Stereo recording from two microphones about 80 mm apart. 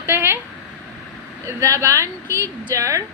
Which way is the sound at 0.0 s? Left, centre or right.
Right.